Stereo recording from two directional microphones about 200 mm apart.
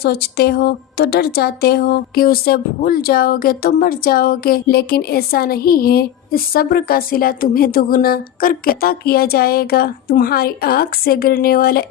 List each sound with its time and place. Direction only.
0.0 s a woman's voice: 50° left (ahead or behind)